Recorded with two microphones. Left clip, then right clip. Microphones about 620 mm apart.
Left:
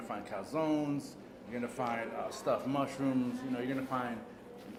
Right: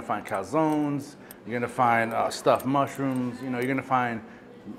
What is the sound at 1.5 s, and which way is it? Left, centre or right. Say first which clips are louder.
Speech: right 13 dB; right.